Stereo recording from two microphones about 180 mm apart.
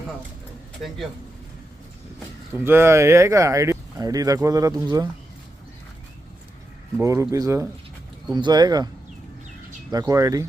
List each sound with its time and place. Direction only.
2.5 s speech: 15° right (ahead or behind)
7.0 s speech: 15° right (ahead or behind)
9.9 s speech: 20° right (ahead or behind)